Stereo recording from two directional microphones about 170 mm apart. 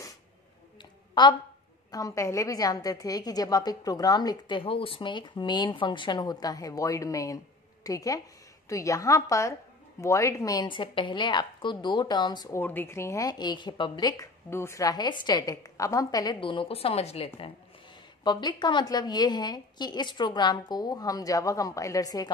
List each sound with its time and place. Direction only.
1.2 s a woman's voice: 25° left (ahead or behind)
18.2 s a woman's voice: 25° left (ahead or behind)